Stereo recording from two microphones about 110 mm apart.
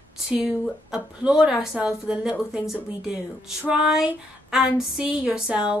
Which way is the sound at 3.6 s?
10° right (ahead or behind).